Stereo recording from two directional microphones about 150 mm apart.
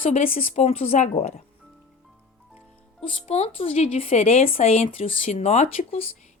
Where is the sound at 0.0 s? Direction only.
45° left (ahead or behind).